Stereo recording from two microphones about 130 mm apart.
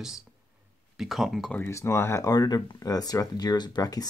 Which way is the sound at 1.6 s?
20° left (ahead or behind).